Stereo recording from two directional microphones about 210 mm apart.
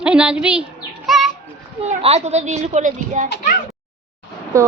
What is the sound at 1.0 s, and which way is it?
Bird, centre (ahead or behind).